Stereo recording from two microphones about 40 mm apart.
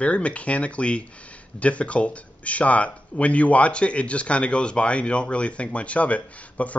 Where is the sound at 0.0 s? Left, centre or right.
Left.